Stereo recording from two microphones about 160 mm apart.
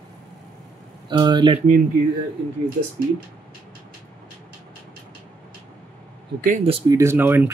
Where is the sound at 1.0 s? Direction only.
30° right (ahead or behind).